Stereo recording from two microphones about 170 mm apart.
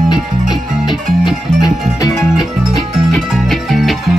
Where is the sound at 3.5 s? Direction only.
Centre (ahead or behind).